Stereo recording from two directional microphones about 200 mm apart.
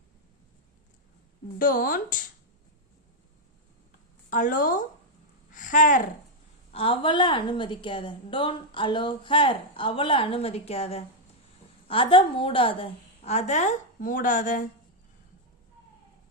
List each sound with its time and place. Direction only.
1.5 s speech: 45° left (ahead or behind)
4.3 s speech: 40° left (ahead or behind)
5.5 s a sound: 40° left (ahead or behind)
6.7 s a woman's voice: 25° left (ahead or behind)